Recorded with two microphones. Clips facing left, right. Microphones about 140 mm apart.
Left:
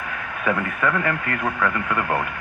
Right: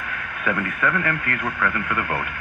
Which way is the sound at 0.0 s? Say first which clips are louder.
Left 2 dB; 35° left (ahead or behind).